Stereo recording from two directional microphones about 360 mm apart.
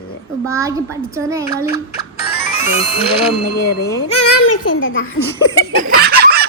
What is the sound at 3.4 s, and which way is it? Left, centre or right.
Speech, left.